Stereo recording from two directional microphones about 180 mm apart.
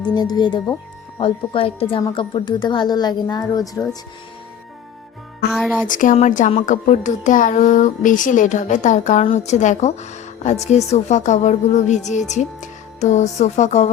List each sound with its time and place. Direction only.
0.0 s a woman's voice: 25° left (ahead or behind)
5.5 s music: centre (ahead or behind)
5.9 s a woman's voice: 45° left (ahead or behind)